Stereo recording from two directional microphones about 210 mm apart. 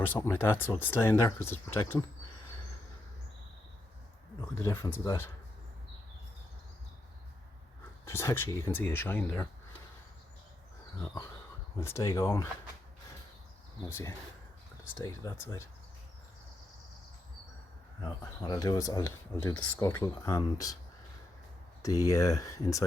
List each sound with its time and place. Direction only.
0.3 s speech: 10° left (ahead or behind)
4.4 s speech: 10° left (ahead or behind)
8.0 s speech: 10° left (ahead or behind)
11.8 s speech: 15° left (ahead or behind)
13.8 s speech: 15° left (ahead or behind)
18.0 s speech: 20° left (ahead or behind)
21.8 s speech: 15° left (ahead or behind)